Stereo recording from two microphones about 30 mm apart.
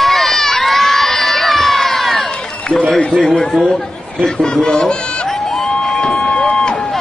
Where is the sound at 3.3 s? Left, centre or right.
Centre.